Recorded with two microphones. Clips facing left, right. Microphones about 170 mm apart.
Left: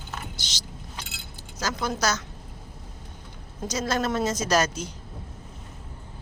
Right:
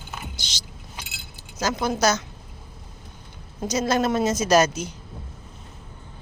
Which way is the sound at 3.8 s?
15° right (ahead or behind).